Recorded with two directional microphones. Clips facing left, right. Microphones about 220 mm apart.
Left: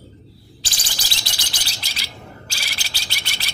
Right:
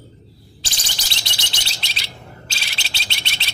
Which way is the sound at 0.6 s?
25° right (ahead or behind).